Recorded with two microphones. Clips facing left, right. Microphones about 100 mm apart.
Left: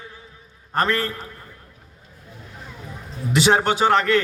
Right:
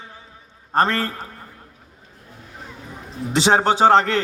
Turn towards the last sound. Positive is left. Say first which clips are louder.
# right 3 dB
turn(degrees=-30)  # may be behind; listen again after turning